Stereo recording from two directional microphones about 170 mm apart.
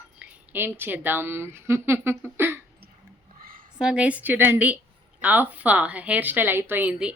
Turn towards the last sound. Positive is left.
turn(degrees=-10)  # may be behind; listen again after turning